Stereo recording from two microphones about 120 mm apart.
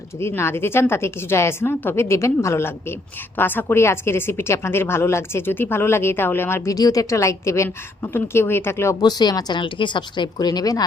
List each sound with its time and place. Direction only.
0.2 s a woman's voice: 20° left (ahead or behind)
6.7 s a woman's voice: 30° left (ahead or behind)
9.0 s speech: 35° left (ahead or behind)